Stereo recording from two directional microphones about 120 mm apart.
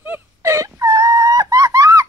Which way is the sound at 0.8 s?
30° right (ahead or behind).